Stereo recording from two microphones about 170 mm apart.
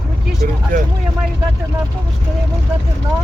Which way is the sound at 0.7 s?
50° right (ahead or behind).